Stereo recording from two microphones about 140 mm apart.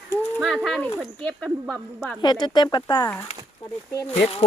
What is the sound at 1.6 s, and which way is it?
Speech, 5° right (ahead or behind).